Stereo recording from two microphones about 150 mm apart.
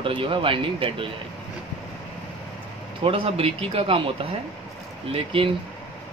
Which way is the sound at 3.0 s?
40° right (ahead or behind).